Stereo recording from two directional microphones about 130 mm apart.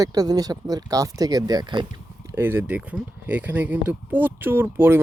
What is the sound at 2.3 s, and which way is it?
Speech, 15° right (ahead or behind).